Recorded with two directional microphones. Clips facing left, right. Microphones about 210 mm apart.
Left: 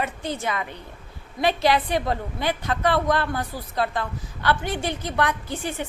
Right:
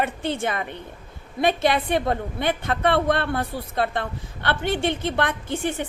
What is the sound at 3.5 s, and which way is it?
Speech, 30° right (ahead or behind).